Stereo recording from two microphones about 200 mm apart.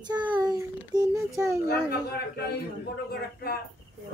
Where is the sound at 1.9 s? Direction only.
55° left (ahead or behind).